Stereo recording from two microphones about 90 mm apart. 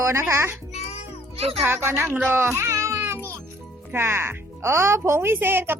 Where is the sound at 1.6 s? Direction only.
25° right (ahead or behind).